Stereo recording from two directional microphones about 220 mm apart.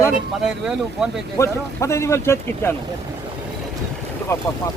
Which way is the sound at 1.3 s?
15° left (ahead or behind).